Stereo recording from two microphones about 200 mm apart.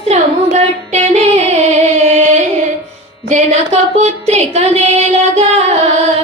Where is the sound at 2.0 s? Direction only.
35° right (ahead or behind).